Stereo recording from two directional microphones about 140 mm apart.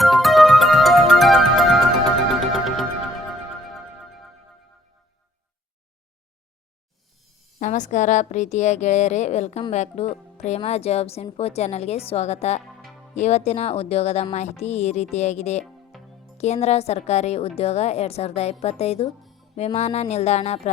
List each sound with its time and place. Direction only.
0.0 s music: centre (ahead or behind)
7.6 s a woman's voice: 60° left (ahead or behind)
15.9 s music: centre (ahead or behind)
16.4 s a woman's voice: 50° left (ahead or behind)
19.2 s music: centre (ahead or behind)
19.5 s a woman's voice: 50° left (ahead or behind)